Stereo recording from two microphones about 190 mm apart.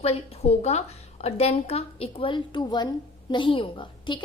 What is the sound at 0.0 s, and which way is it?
A woman's voice, 30° left (ahead or behind).